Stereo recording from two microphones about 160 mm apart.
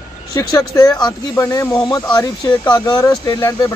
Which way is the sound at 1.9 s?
25° left (ahead or behind).